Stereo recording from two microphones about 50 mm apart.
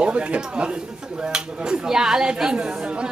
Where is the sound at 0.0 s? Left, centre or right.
Right.